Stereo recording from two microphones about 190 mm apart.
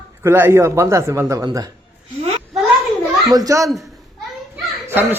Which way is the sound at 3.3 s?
20° right (ahead or behind).